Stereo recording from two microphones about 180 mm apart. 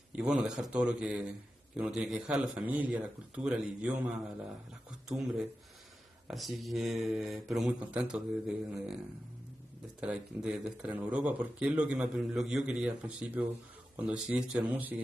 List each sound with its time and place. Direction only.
0.1 s speech: 5° right (ahead or behind)
9.9 s speech: 5° right (ahead or behind)